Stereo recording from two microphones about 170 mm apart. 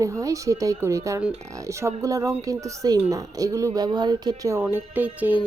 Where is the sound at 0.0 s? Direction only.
20° right (ahead or behind).